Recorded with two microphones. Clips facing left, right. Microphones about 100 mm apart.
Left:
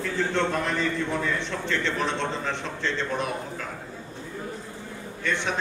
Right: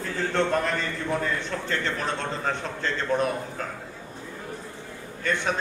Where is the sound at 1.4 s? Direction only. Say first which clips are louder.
Left 1 dB; 40° right (ahead or behind).